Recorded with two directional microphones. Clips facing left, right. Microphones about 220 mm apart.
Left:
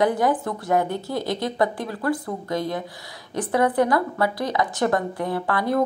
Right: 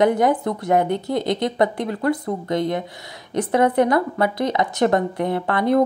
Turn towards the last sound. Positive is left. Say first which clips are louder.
# right 4 dB
turn(degrees=-20)  # may be behind; listen again after turning